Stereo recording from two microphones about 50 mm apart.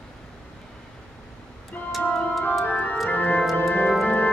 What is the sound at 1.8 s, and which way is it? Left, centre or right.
Music, left.